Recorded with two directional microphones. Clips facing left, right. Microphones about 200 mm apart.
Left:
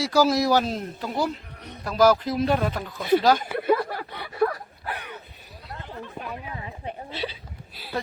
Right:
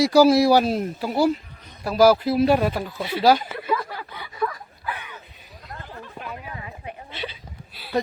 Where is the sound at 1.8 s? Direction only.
10° right (ahead or behind).